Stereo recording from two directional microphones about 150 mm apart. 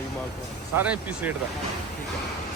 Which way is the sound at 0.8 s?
10° right (ahead or behind).